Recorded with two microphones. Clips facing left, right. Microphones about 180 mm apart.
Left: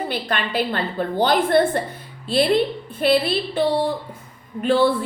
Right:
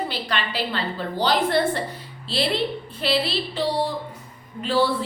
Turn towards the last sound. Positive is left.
turn(degrees=55)  # may be behind; listen again after turning